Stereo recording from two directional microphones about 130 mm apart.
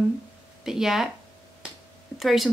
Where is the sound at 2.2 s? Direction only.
Centre (ahead or behind).